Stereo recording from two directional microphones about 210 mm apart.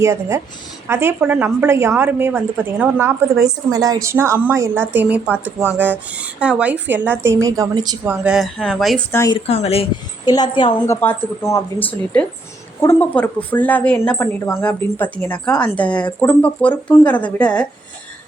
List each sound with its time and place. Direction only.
0.0 s a woman's voice: 15° right (ahead or behind)
8.2 s speech: centre (ahead or behind)
9.1 s a woman's voice: 15° left (ahead or behind)
9.5 s a woman's voice: 30° left (ahead or behind)
11.0 s a woman's voice: 10° left (ahead or behind)